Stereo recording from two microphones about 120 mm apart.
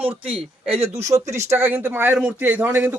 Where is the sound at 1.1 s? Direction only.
25° right (ahead or behind).